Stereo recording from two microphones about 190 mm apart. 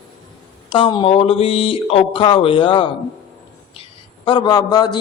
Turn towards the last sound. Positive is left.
turn(degrees=20)  # may be behind; listen again after turning